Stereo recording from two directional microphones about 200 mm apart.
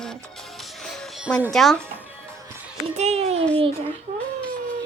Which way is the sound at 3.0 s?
30° right (ahead or behind).